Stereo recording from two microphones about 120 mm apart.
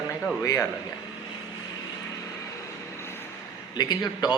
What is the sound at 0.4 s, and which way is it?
Speech, 25° left (ahead or behind).